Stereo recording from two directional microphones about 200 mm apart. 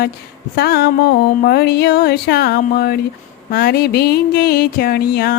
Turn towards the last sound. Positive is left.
turn(degrees=50)  # may be behind; listen again after turning